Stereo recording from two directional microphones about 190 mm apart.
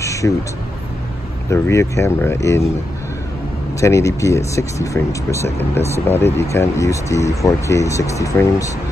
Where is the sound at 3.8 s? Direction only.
15° left (ahead or behind).